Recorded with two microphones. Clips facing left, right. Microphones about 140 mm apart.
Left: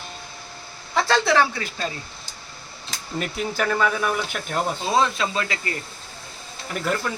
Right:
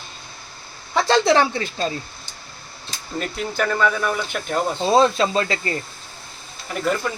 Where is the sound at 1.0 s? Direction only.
25° right (ahead or behind).